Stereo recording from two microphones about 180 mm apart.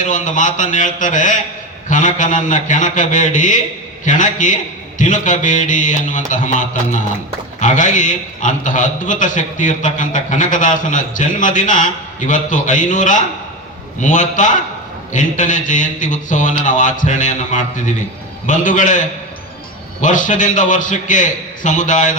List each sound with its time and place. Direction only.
0.0 s a man's voice: 45° left (ahead or behind)